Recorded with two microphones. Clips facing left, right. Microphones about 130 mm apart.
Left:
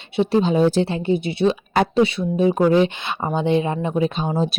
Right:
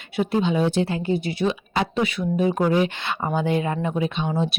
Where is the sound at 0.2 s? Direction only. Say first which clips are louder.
Left 4 dB; 30° left (ahead or behind).